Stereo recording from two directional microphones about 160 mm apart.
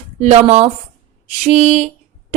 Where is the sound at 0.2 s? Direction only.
45° right (ahead or behind).